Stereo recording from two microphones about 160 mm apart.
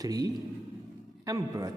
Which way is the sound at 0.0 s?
25° right (ahead or behind).